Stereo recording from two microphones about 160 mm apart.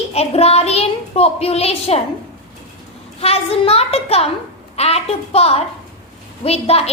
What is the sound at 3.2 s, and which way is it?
A woman's voice, 40° left (ahead or behind).